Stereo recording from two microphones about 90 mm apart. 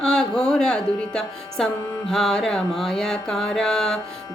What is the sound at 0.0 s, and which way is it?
Speech, 10° left (ahead or behind).